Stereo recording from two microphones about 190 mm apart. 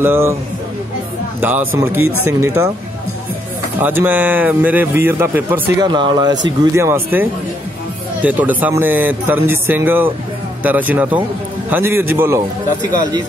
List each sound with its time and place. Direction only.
0.0 s a man's voice: 15° right (ahead or behind)
1.4 s a man's voice: 10° right (ahead or behind)
3.8 s a man's voice: 10° right (ahead or behind)
5.9 s a man's voice: 25° right (ahead or behind)